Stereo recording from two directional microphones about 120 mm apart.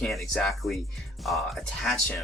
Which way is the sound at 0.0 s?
Centre (ahead or behind).